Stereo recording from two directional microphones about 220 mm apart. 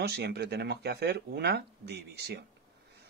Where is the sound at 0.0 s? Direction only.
45° right (ahead or behind).